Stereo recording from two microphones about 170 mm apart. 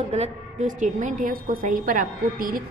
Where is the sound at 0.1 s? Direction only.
45° right (ahead or behind).